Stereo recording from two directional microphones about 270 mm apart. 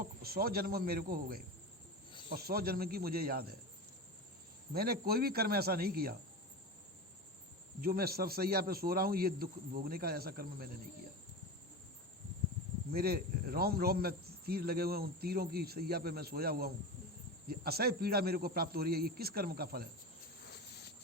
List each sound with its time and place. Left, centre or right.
0.0 s speech: right
4.7 s speech: right
7.8 s speech: right
12.9 s speech: right
20.4 s a sound: left